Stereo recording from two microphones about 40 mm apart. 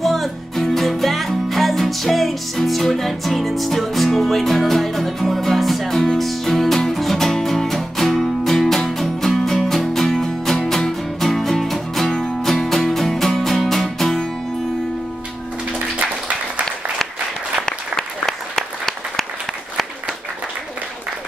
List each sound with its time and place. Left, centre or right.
0.0 s music: centre
17.6 s applause: centre